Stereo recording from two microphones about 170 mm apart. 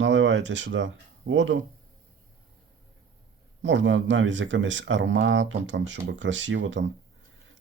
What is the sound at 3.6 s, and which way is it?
Speech, 90° right.